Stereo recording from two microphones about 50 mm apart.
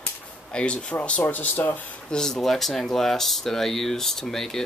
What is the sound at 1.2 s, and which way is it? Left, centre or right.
Speech, left.